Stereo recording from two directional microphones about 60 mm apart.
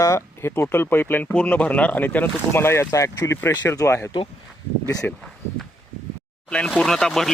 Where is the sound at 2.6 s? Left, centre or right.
Left.